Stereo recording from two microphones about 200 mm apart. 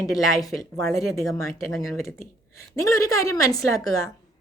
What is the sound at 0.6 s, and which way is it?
A woman's voice, 15° left (ahead or behind).